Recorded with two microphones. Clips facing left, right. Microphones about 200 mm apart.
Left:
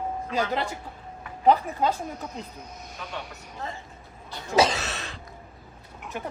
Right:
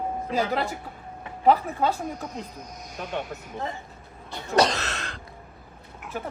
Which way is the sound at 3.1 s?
55° right (ahead or behind).